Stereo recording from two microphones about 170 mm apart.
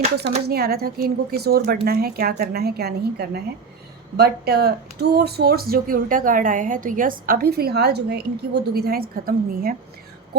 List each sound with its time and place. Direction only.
0.2 s speech: 65° right (ahead or behind)